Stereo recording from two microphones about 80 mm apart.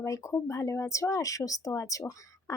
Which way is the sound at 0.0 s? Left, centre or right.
Left.